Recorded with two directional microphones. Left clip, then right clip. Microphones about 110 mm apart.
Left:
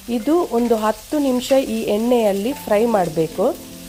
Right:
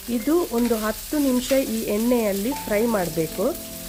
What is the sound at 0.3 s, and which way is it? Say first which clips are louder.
Sizzle: left 5 dB; 15° left (ahead or behind).